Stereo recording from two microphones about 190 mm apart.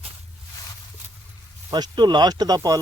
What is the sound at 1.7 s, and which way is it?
Speech, 20° right (ahead or behind).